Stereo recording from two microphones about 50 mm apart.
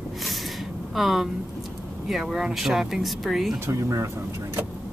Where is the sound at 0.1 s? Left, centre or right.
Centre.